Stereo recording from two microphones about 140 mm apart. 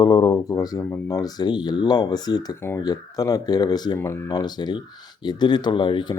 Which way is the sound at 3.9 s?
20° left (ahead or behind).